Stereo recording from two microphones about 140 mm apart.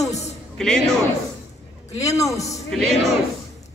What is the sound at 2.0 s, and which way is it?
Speech, 25° left (ahead or behind).